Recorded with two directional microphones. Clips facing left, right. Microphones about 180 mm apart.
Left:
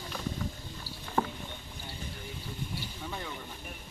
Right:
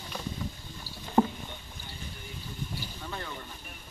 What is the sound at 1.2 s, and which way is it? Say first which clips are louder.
Rowboat: right 6 dB; 25° right (ahead or behind).